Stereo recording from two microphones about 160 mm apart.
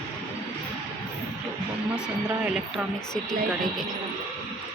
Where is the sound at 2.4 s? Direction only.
Centre (ahead or behind).